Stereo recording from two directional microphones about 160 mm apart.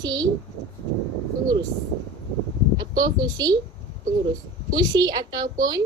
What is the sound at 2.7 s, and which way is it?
Speech, 25° right (ahead or behind).